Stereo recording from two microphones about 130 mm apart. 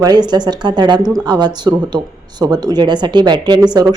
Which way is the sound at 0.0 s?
30° right (ahead or behind).